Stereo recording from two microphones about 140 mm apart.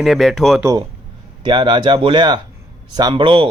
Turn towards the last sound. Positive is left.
turn(degrees=-35)  # may be behind; listen again after turning